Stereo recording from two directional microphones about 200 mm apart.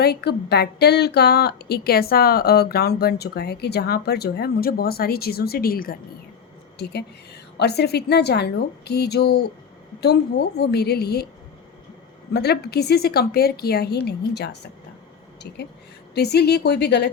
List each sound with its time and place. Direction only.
0.0 s a woman's voice: 55° left (ahead or behind)
12.3 s a woman's voice: 55° left (ahead or behind)